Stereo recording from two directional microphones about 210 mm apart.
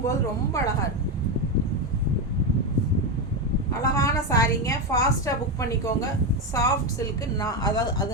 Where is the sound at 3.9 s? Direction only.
15° left (ahead or behind).